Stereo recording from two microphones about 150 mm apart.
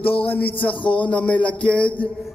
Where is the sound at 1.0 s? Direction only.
10° left (ahead or behind).